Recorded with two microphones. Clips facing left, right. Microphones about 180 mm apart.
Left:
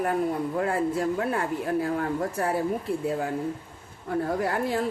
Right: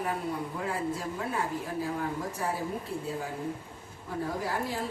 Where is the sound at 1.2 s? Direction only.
60° left (ahead or behind).